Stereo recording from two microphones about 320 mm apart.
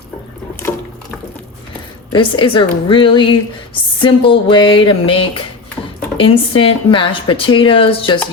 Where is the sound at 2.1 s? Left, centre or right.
Centre.